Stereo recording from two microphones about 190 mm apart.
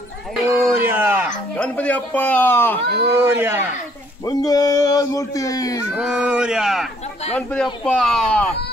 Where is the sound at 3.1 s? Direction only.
15° right (ahead or behind).